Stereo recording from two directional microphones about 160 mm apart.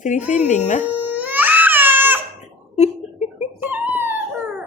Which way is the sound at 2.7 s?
45° left (ahead or behind).